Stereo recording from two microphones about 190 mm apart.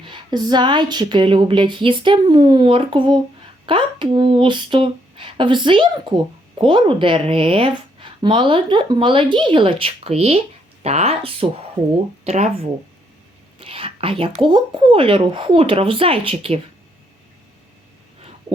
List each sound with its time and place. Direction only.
0.0 s a woman's voice: 25° right (ahead or behind)
13.6 s a woman's voice: 30° right (ahead or behind)